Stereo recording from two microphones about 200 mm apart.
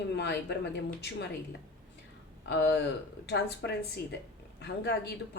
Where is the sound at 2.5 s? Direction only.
55° left (ahead or behind).